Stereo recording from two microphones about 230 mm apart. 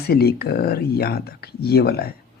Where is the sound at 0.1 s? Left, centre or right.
Left.